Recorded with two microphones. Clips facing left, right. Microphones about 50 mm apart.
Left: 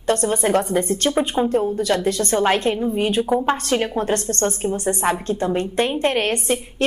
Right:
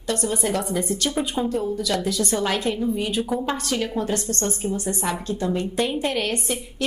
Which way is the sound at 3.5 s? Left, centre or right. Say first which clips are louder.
Left 4 dB; left.